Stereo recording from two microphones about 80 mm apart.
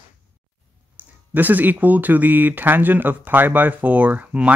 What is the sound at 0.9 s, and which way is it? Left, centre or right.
Speech, right.